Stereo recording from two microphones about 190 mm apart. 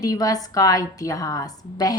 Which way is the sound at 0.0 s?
20° left (ahead or behind).